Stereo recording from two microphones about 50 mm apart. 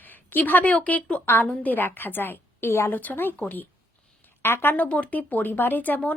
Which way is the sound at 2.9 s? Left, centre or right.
Left.